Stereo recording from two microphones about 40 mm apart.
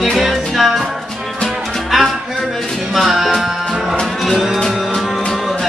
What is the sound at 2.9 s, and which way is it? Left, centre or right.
Music, centre.